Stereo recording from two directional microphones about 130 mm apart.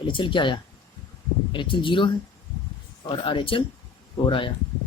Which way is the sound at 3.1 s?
40° left (ahead or behind).